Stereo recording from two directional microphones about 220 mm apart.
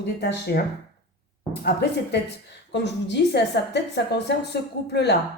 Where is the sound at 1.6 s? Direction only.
50° left (ahead or behind).